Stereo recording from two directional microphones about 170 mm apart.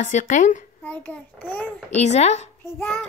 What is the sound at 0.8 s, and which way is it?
Speech, 10° left (ahead or behind).